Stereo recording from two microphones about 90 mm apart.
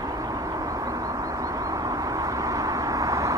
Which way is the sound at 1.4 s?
40° right (ahead or behind).